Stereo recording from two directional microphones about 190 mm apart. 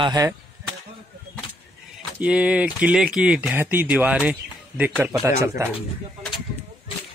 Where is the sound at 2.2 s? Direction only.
5° right (ahead or behind).